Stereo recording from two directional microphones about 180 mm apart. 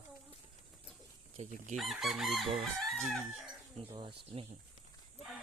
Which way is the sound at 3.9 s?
30° right (ahead or behind).